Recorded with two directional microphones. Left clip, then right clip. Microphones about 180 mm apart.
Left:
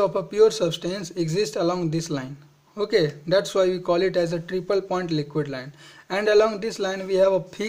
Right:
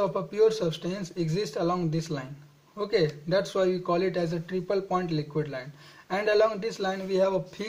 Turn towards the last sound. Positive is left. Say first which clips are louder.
# left 6 dB
turn(degrees=30)  # may be behind; listen again after turning